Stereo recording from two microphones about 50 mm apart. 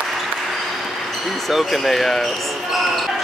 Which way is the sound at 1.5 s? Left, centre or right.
Centre.